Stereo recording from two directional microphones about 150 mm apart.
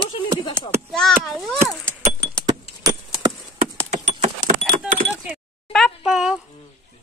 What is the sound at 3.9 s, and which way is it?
Keys jangling, 50° right (ahead or behind).